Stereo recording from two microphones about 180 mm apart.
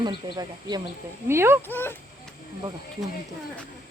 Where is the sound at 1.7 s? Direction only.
10° left (ahead or behind).